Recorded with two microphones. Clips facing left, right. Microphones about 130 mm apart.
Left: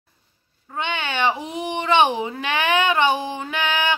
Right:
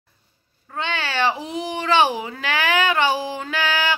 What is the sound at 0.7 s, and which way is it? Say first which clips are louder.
Speech: even; 20° left (ahead or behind).